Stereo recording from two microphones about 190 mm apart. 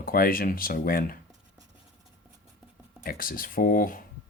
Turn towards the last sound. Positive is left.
turn(degrees=45)  # may be behind; listen again after turning